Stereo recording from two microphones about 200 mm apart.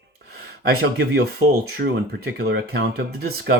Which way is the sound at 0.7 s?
55° right (ahead or behind).